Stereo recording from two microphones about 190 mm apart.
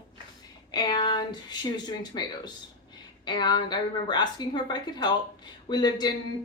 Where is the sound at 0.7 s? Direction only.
25° left (ahead or behind).